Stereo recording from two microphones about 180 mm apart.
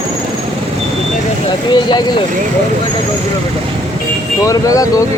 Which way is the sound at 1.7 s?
25° left (ahead or behind).